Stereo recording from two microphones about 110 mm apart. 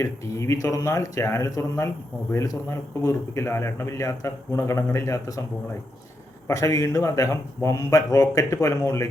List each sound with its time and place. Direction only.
0.0 s speech: 30° left (ahead or behind)
6.5 s speech: 30° left (ahead or behind)